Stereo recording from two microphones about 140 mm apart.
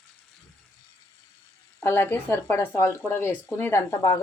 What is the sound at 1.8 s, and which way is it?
Speech, 15° left (ahead or behind).